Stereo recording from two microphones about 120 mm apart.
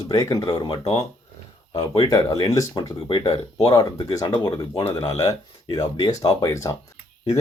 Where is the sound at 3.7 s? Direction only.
35° left (ahead or behind).